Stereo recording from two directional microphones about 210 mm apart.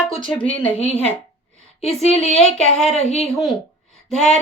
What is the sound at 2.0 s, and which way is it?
A woman's voice, 30° left (ahead or behind).